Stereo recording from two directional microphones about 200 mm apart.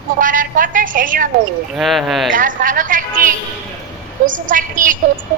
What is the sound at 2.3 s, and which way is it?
A woman's voice, 40° right (ahead or behind).